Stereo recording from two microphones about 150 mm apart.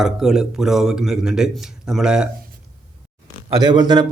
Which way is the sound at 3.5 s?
30° right (ahead or behind).